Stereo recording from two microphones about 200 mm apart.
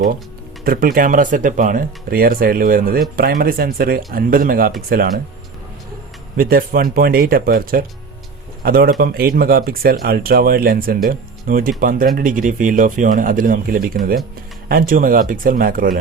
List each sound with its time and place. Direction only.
0.6 s speech: 45° right (ahead or behind)
6.3 s speech: 45° right (ahead or behind)